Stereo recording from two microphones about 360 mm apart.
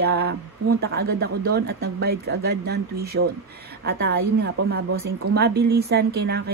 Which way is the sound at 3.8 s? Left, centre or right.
Right.